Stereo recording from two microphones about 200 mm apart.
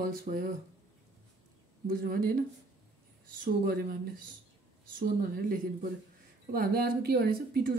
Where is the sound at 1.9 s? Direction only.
45° right (ahead or behind).